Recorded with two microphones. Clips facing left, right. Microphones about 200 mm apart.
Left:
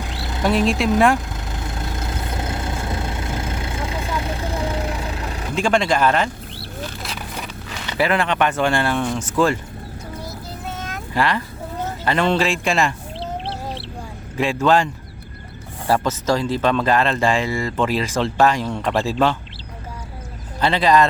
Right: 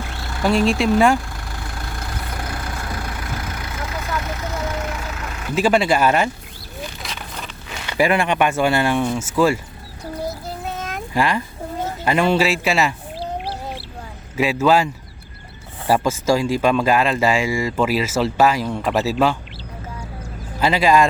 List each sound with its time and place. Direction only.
0.2 s vehicle: 20° left (ahead or behind)
0.4 s speech: centre (ahead or behind)
1.5 s vehicle: 20° left (ahead or behind)
5.5 s speech: 5° right (ahead or behind)
7.0 s a sound: 10° left (ahead or behind)
7.9 s speech: 15° right (ahead or behind)
11.1 s speech: 15° right (ahead or behind)
14.3 s speech: 5° right (ahead or behind)
15.9 s speech: 10° right (ahead or behind)
20.6 s speech: 10° right (ahead or behind)